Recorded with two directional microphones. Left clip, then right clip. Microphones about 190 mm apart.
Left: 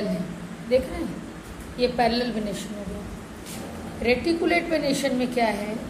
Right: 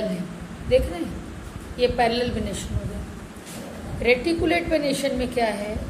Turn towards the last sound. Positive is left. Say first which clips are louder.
# even
turn(degrees=-5)  # may be behind; listen again after turning